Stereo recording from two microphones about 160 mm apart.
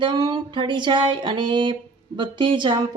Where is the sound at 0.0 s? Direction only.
30° right (ahead or behind).